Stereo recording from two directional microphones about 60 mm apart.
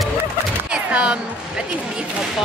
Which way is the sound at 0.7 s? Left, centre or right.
Centre.